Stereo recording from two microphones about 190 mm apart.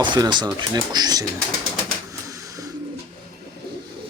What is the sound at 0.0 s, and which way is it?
Speech, 25° right (ahead or behind).